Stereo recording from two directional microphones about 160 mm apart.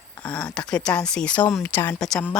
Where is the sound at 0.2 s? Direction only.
5° left (ahead or behind).